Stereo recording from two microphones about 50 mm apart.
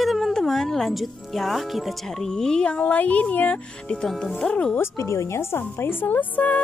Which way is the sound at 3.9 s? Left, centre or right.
Centre.